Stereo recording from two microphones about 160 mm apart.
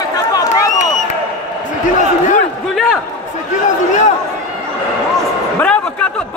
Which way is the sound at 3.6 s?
50° left (ahead or behind).